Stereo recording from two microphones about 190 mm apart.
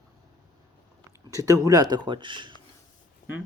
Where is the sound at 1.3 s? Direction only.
15° right (ahead or behind).